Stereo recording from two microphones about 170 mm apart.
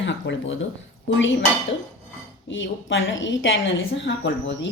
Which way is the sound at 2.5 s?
90° left.